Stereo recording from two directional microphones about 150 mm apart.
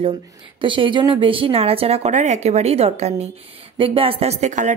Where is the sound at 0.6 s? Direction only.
35° right (ahead or behind).